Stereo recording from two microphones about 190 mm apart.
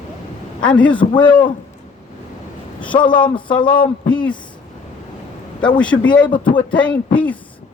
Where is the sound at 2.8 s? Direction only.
5° left (ahead or behind).